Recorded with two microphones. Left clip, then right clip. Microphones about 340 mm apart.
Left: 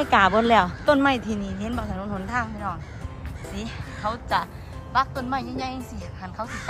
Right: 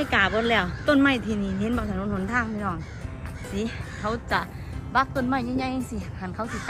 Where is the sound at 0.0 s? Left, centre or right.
Centre.